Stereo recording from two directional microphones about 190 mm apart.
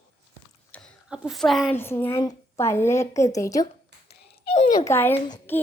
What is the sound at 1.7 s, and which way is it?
A woman's voice, 10° left (ahead or behind).